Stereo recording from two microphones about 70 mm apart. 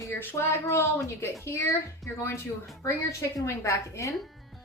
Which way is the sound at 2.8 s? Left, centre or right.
Left.